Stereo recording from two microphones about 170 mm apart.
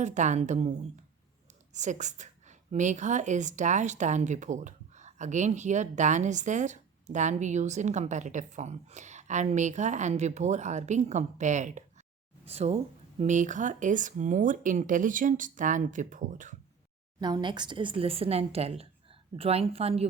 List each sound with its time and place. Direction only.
0.0 s a woman's voice: 45° right (ahead or behind)
17.2 s a woman's voice: 25° right (ahead or behind)